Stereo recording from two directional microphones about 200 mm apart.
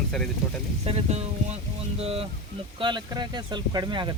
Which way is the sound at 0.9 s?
30° right (ahead or behind).